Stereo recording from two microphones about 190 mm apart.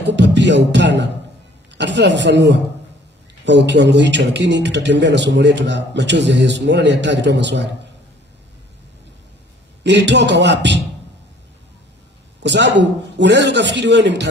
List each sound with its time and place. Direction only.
0.0 s music: 65° right (ahead or behind)
1.7 s a man's voice: 65° right (ahead or behind)
9.8 s a man's voice: 65° right (ahead or behind)
12.4 s a man's voice: 65° right (ahead or behind)